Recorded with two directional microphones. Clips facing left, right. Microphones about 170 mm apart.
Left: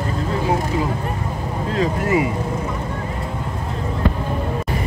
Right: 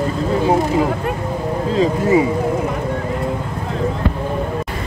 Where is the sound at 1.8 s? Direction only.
25° right (ahead or behind).